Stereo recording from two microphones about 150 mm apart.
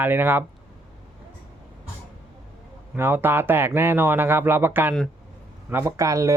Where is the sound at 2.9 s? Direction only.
15° right (ahead or behind).